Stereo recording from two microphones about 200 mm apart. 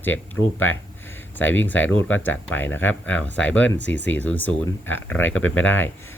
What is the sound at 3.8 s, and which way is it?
Speech, 65° left (ahead or behind).